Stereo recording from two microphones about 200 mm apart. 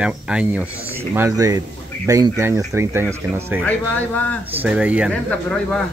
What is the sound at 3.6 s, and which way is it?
Speech, 10° left (ahead or behind).